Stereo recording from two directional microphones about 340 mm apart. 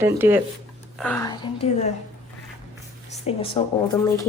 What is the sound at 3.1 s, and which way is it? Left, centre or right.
Speech, centre.